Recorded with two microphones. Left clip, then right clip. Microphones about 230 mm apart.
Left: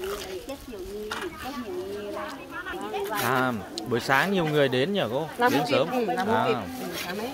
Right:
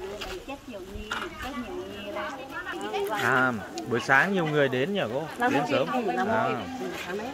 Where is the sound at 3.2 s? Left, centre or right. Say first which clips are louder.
Right 2 dB; centre.